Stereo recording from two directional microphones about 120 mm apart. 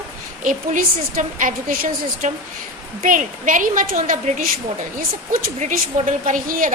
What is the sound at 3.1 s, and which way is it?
A woman's voice, 90° right.